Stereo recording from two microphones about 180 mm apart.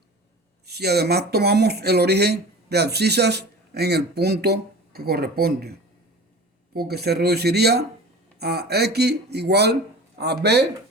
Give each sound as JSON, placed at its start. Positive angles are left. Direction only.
{"t": 0.6, "sound": "speech", "side_deg": -65}
{"t": 6.7, "sound": "speech", "side_deg": -60}